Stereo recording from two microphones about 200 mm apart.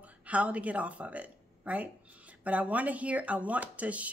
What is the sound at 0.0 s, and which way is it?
Speech, 5° right (ahead or behind).